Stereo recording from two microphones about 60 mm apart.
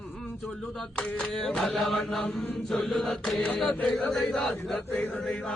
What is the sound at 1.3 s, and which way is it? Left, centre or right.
Chant, centre.